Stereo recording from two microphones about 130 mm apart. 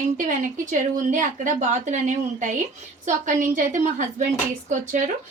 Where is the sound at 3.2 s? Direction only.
85° right.